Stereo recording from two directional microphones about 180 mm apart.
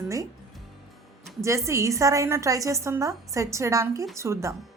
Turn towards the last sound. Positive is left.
turn(degrees=-15)  # may be behind; listen again after turning